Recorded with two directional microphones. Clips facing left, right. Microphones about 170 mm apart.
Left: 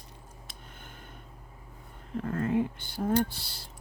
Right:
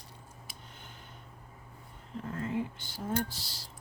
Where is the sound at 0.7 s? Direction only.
50° left (ahead or behind).